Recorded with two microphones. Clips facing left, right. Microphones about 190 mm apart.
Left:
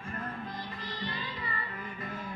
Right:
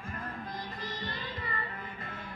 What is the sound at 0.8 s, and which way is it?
Music, 45° right (ahead or behind).